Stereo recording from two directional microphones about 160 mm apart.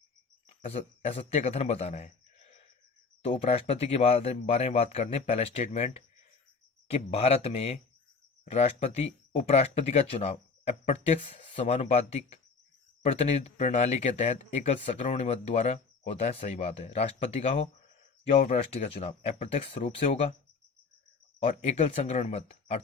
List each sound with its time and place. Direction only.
0.4 s a man's voice: 40° left (ahead or behind)
21.4 s speech: 40° left (ahead or behind)